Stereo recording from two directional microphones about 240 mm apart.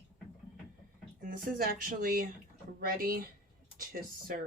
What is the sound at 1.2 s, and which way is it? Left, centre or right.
Speech, right.